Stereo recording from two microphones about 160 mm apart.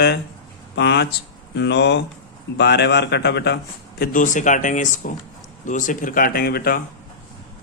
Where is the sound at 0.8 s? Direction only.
90° left; by 6.8 s 70° left (ahead or behind).